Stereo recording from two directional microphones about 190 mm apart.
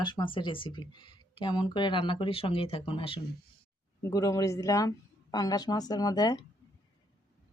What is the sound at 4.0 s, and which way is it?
Speech, 15° left (ahead or behind).